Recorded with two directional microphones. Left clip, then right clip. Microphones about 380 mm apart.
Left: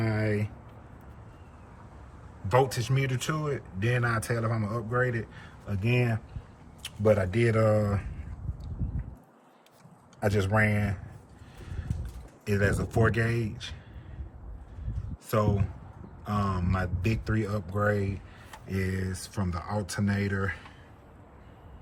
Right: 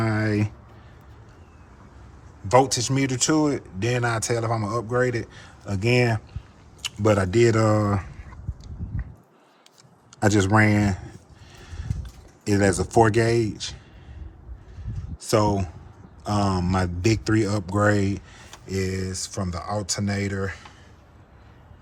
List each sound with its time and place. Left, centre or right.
0.0 s a sound: centre
2.5 s speech: centre
10.2 s speech: right
12.5 s speech: centre
15.3 s speech: centre